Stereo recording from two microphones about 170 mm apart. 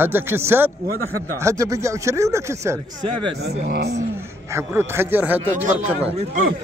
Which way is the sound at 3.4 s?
70° right (ahead or behind).